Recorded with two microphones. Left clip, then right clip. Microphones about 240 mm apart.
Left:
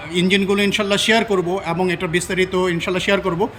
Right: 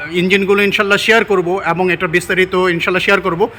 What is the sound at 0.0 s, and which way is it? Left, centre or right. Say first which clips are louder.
Speech: right 4 dB; centre.